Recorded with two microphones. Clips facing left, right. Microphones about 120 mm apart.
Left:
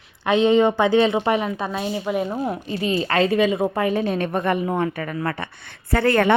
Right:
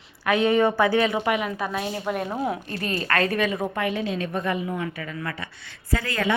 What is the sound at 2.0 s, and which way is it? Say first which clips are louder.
Speech: left 2 dB; centre (ahead or behind).